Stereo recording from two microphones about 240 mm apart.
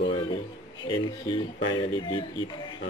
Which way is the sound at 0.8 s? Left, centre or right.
Centre.